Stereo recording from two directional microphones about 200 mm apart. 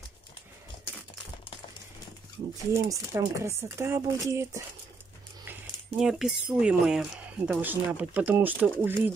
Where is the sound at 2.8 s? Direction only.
15° right (ahead or behind).